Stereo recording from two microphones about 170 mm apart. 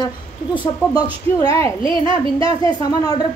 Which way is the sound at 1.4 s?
20° left (ahead or behind).